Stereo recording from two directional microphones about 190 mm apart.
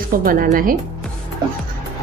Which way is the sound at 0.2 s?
50° right (ahead or behind).